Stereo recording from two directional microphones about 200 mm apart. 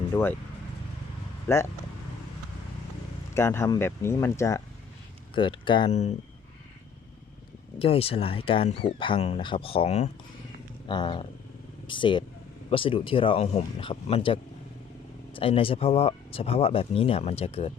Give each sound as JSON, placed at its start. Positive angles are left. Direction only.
{"t": 0.1, "sound": "speech", "side_deg": 10}
{"t": 1.5, "sound": "speech", "side_deg": 10}
{"t": 3.3, "sound": "speech", "side_deg": 15}
{"t": 7.8, "sound": "speech", "side_deg": 30}